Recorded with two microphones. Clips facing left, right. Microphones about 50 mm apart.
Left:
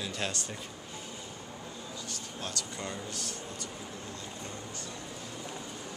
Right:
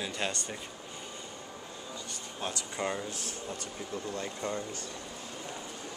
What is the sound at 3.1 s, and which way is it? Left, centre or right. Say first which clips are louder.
Speech: even; left.